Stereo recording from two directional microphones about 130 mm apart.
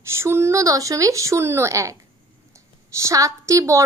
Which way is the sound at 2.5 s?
25° right (ahead or behind).